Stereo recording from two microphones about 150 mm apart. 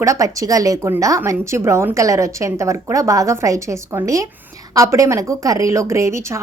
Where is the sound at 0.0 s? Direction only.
20° right (ahead or behind).